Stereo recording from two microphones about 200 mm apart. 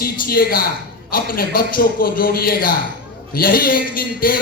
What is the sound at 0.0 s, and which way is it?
A man's voice, 50° left (ahead or behind).